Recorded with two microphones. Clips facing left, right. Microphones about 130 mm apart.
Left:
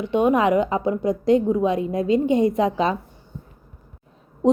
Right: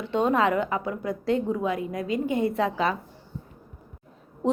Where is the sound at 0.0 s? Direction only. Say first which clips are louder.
Left 4 dB; 15° left (ahead or behind).